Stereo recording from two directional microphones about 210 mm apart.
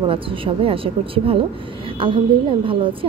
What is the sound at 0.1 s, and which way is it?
Speech, 25° right (ahead or behind).